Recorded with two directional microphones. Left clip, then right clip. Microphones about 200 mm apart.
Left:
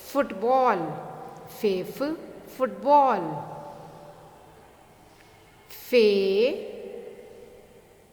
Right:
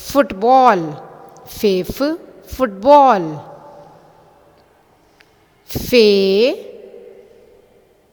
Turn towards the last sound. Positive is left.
turn(degrees=-40)  # may be behind; listen again after turning